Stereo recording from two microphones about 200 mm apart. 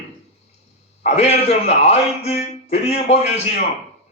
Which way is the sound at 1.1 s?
35° left (ahead or behind).